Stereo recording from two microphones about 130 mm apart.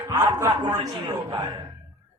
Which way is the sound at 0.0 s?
25° right (ahead or behind).